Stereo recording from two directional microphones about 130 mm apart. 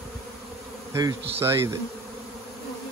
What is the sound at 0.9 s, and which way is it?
Insect, 25° right (ahead or behind).